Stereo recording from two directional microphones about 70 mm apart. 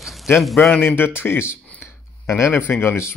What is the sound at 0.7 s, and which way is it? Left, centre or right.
Speech, left.